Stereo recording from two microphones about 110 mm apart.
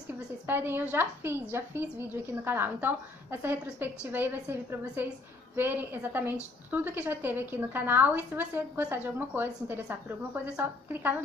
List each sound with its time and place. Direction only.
0.5 s a woman's voice: 20° right (ahead or behind)